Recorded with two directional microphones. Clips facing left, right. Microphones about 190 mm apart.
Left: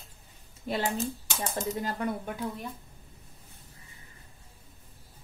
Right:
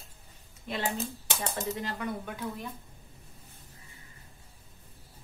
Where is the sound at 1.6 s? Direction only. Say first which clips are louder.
Left 6 dB; 40° left (ahead or behind).